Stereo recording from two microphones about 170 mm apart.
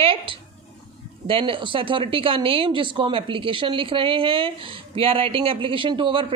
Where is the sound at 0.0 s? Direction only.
30° right (ahead or behind).